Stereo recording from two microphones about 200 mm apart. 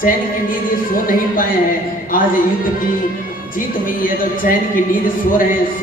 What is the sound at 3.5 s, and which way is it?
A man's voice, 45° left (ahead or behind).